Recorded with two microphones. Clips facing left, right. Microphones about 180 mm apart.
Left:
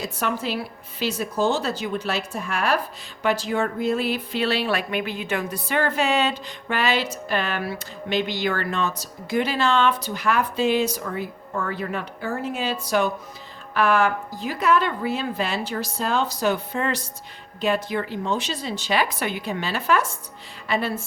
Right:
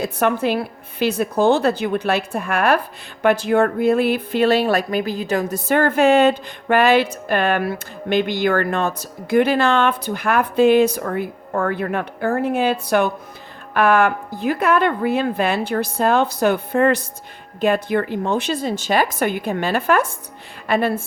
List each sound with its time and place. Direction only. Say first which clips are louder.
0.0 s a woman's voice: right 7 dB; 55° right (ahead or behind)